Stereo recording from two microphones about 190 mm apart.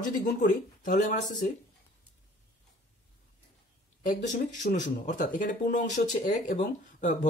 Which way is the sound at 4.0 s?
40° left (ahead or behind).